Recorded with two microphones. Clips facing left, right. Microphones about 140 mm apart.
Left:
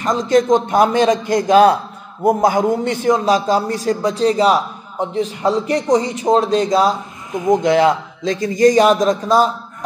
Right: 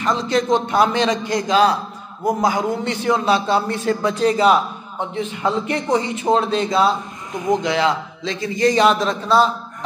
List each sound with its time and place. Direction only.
0.0 s a man's voice: 45° left (ahead or behind)